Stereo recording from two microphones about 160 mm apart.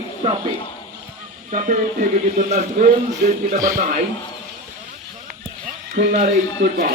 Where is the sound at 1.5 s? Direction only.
50° right (ahead or behind).